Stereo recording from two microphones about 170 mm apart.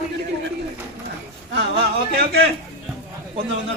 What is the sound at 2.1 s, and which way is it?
Speech, 70° right (ahead or behind).